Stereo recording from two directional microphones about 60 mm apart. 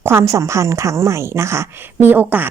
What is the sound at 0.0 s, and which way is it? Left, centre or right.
Speech, right.